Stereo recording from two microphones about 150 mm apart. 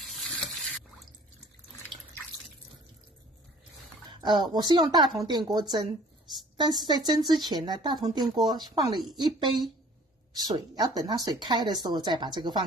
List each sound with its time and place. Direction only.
4.2 s speech: 30° right (ahead or behind)